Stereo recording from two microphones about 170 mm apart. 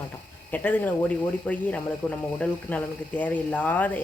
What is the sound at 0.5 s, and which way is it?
Speech, 10° left (ahead or behind).